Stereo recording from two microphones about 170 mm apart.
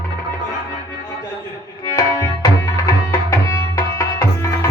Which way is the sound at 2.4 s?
20° left (ahead or behind).